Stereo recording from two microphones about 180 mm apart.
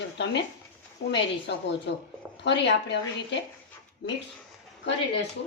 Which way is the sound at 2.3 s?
80° left.